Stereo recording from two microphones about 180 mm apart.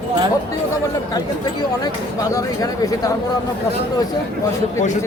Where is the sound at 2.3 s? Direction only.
20° left (ahead or behind).